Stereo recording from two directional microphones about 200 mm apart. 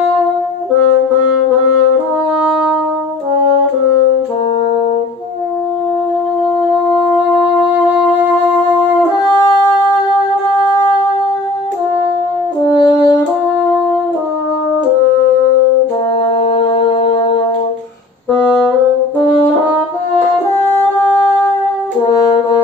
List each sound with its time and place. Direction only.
12.7 s french horn: 20° left (ahead or behind)